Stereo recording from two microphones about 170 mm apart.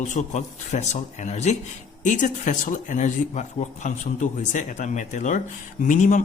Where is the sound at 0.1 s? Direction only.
45° left (ahead or behind).